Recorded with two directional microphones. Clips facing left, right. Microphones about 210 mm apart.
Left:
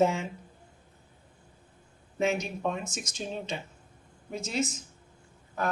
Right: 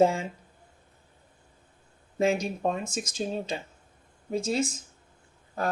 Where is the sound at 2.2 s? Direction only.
35° right (ahead or behind).